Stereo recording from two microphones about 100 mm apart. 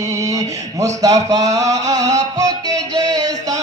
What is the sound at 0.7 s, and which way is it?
Music, 35° right (ahead or behind).